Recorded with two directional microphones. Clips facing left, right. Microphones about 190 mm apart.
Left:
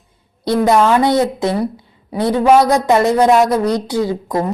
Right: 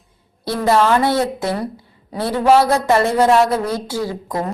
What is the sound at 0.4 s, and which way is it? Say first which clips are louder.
A woman's voice: left 3 dB; 20° left (ahead or behind).